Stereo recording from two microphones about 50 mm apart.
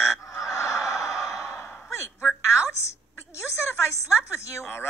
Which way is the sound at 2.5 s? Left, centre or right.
Left.